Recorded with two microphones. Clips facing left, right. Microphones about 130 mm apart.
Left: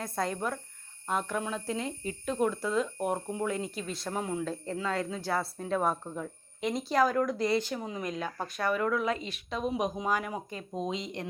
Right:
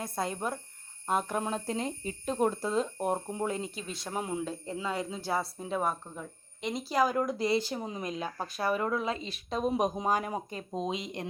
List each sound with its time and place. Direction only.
0.0 s speech: 25° right (ahead or behind)
1.0 s speech: 35° right (ahead or behind); by 7.1 s 5° right (ahead or behind)
7.1 s speech: 25° right (ahead or behind)
10.7 s speech: 20° right (ahead or behind)